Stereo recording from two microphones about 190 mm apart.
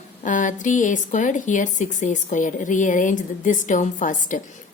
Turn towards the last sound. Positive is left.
turn(degrees=45)  # may be behind; listen again after turning